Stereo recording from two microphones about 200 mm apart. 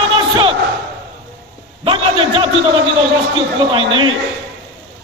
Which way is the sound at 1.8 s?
25° right (ahead or behind).